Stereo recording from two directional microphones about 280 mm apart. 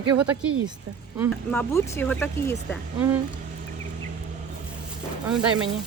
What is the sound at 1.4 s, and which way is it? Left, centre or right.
Speech, centre.